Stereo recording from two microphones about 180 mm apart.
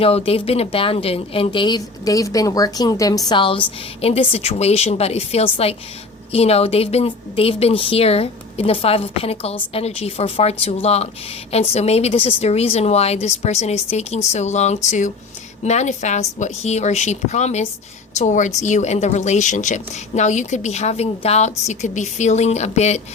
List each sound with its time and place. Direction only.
0.0 s a woman's voice: 30° left (ahead or behind)